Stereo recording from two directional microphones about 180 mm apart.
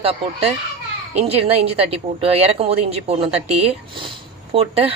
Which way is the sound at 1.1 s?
35° right (ahead or behind).